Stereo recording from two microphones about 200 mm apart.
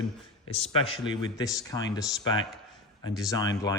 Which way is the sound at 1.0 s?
20° left (ahead or behind).